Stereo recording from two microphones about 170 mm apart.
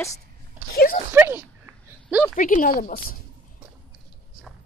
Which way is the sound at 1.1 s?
15° right (ahead or behind).